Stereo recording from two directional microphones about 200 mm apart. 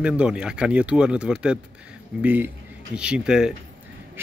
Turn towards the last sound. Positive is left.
turn(degrees=-5)  # may be behind; listen again after turning